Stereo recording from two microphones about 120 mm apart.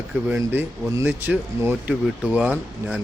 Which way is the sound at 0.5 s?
15° right (ahead or behind).